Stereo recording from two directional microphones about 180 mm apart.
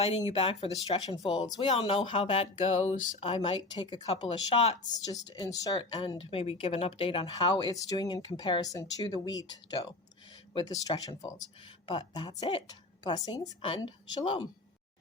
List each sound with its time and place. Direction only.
0.0 s speech: 35° left (ahead or behind)
4.6 s speech: 35° left (ahead or behind)
4.9 s speech: 20° left (ahead or behind)